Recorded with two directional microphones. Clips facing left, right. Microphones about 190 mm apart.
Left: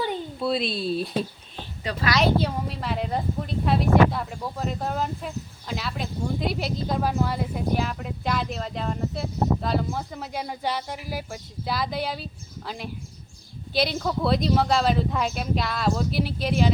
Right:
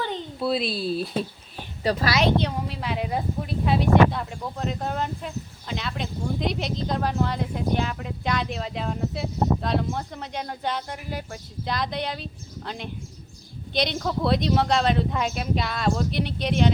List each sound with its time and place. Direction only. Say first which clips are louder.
0.3 s speech: right 2 dB; centre (ahead or behind)
1.8 s speech: right 3 dB; 35° right (ahead or behind)
2.1 s speech: even; centre (ahead or behind)